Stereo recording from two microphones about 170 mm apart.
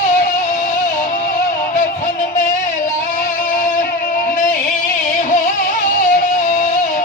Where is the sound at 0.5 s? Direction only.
50° left (ahead or behind).